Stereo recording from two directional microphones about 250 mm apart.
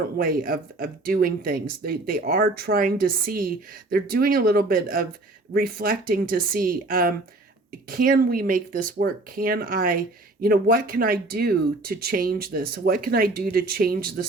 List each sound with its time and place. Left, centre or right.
0.2 s speech: right